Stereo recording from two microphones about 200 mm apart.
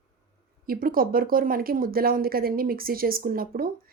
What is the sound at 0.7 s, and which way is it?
Speech, 45° right (ahead or behind).